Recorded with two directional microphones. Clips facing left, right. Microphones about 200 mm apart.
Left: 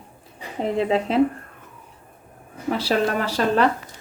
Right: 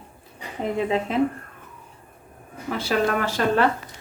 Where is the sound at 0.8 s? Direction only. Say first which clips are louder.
Left 3 dB; 35° left (ahead or behind).